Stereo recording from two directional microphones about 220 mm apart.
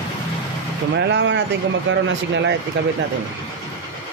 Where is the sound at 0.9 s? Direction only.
55° right (ahead or behind).